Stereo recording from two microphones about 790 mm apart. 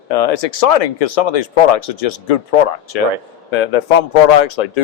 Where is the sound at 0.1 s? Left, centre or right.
Left.